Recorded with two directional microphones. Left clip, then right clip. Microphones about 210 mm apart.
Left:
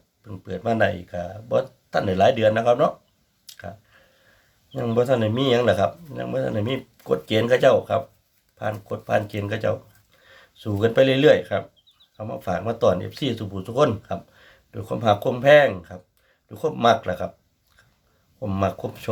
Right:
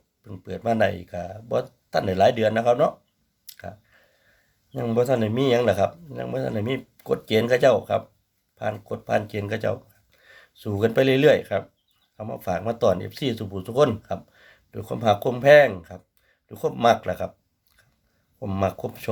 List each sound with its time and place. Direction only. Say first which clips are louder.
0.3 s speech: even; 20° right (ahead or behind)
3.4 s clicking: left 1 dB; 20° right (ahead or behind)
4.7 s speech: left 1 dB; 20° right (ahead or behind)
18.3 s speech: left 1 dB; 20° right (ahead or behind)